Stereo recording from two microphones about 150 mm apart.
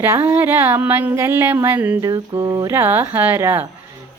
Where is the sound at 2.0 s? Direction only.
25° right (ahead or behind).